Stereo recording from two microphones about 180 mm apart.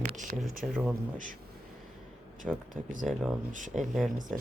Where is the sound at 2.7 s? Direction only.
45° right (ahead or behind).